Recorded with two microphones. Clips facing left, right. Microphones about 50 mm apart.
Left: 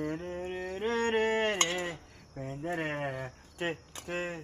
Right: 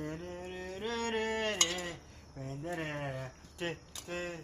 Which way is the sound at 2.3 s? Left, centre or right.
Left.